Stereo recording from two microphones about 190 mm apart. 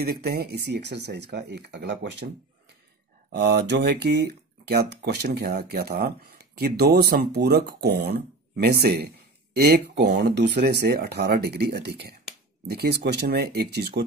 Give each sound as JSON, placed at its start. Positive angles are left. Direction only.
{"t": 0.0, "sound": "speech", "side_deg": -55}
{"t": 3.3, "sound": "speech", "side_deg": -60}